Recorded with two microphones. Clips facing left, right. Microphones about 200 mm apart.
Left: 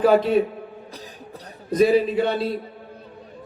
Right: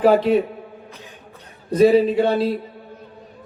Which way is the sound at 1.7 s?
30° right (ahead or behind).